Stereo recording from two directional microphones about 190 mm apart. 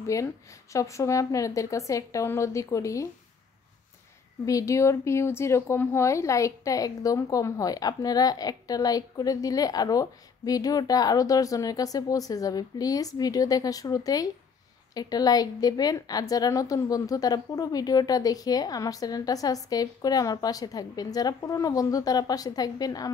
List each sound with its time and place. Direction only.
0.0 s a woman's voice: 15° left (ahead or behind)
4.5 s speech: 15° left (ahead or behind)